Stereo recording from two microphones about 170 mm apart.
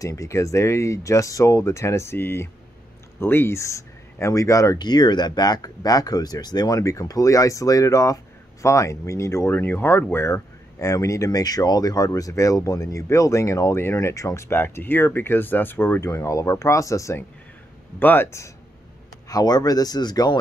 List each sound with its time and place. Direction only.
0.0 s speech: 20° left (ahead or behind)